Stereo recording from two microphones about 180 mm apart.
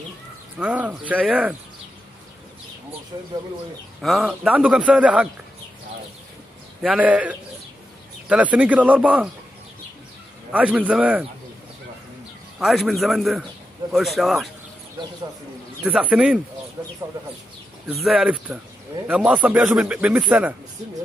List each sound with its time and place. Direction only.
0.6 s speech: 10° right (ahead or behind)
4.0 s a man's voice: centre (ahead or behind)
6.8 s speech: 5° right (ahead or behind)
10.5 s speech: 10° right (ahead or behind)
12.5 s a man's voice: centre (ahead or behind)
15.8 s speech: 5° right (ahead or behind)
16.8 s speech: 15° right (ahead or behind)
18.0 s a man's voice: 5° right (ahead or behind)